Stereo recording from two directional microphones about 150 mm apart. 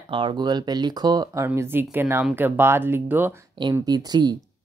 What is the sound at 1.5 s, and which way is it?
Speech, 15° right (ahead or behind).